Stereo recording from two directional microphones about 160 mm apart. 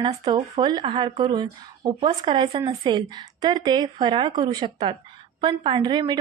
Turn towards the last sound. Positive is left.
turn(degrees=-25)  # may be behind; listen again after turning